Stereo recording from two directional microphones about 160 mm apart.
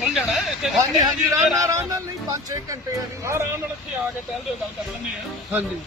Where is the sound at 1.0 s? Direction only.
20° right (ahead or behind).